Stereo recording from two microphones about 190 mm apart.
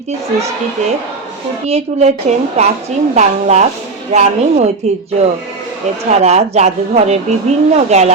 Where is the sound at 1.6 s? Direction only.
35° right (ahead or behind).